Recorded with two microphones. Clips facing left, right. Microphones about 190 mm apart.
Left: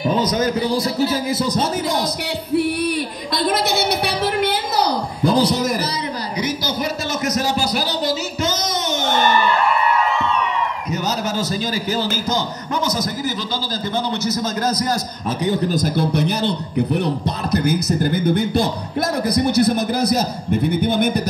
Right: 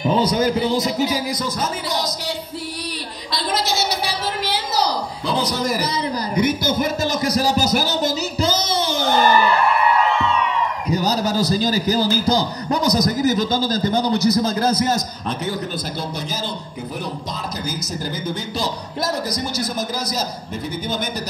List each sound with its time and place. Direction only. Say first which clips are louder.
0.2 s speech: right 1 dB; 30° right (ahead or behind)
4.4 s a sound: left 1 dB; 55° left (ahead or behind)
6.3 s speech: right 5 dB; 50° right (ahead or behind)
7.2 s speech: right 1 dB; 35° right (ahead or behind)
8.5 s music: right 1 dB; 30° right (ahead or behind)
10.9 s a man's voice: right 5 dB; 35° right (ahead or behind)
15.7 s a man's voice: left 8 dB; 50° left (ahead or behind)